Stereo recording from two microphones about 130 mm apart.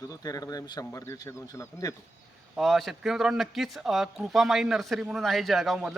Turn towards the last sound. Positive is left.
turn(degrees=0)  # may be behind; listen again after turning